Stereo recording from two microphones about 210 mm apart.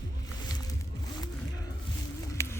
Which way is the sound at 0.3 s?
20° left (ahead or behind).